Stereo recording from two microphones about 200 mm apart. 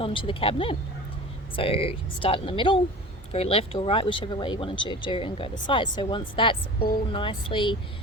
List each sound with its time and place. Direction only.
0.0 s speech: 25° left (ahead or behind)